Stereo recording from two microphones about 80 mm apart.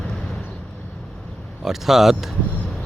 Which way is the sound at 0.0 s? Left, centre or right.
Centre.